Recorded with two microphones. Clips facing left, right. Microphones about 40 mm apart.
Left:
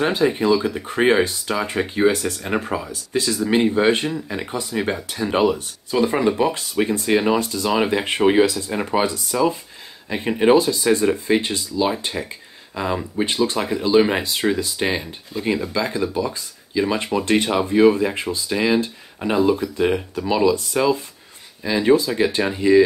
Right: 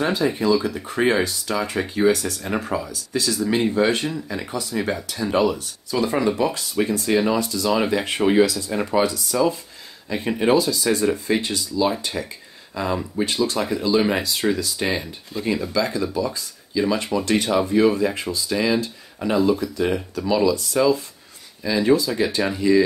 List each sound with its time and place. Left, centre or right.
0.0 s speech: left
7.7 s speech: left
12.2 s speech: centre
15.4 s speech: centre
15.7 s speech: left